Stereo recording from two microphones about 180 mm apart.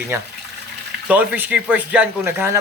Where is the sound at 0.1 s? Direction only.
15° right (ahead or behind).